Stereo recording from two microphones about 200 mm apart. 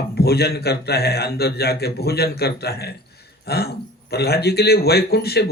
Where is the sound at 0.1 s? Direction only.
55° left (ahead or behind).